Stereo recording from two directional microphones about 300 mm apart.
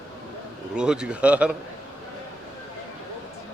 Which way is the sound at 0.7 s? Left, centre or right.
Centre.